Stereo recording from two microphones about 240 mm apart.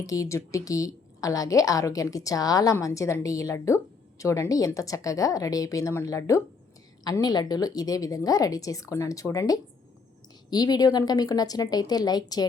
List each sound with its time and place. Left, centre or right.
0.0 s a woman's voice: centre